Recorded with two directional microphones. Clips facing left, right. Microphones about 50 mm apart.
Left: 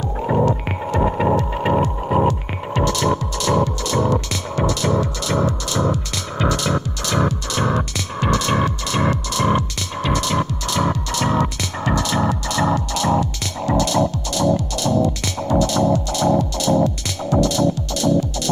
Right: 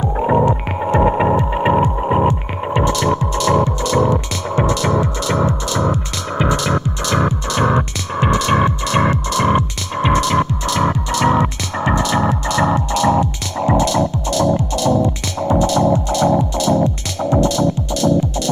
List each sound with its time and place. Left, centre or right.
0.0 s hum: right
3.1 s music: right